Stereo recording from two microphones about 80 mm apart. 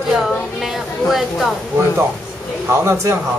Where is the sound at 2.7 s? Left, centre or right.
Right.